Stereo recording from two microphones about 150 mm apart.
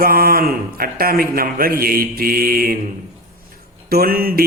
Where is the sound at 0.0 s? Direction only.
75° right (ahead or behind).